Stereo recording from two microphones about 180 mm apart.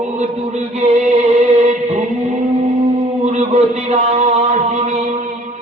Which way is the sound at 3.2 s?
35° right (ahead or behind).